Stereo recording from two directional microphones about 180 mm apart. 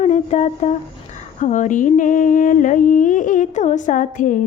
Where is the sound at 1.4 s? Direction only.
40° left (ahead or behind).